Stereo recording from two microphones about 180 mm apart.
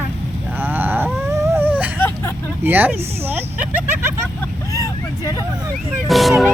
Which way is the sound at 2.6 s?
10° right (ahead or behind).